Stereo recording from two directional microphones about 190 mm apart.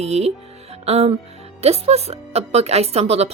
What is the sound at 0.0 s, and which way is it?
A woman's voice, 35° right (ahead or behind).